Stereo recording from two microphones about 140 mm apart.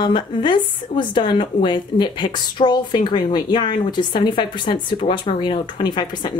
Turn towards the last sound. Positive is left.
turn(degrees=30)  # may be behind; listen again after turning